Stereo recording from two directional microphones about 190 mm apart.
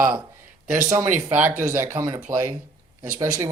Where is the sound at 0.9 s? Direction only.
15° right (ahead or behind).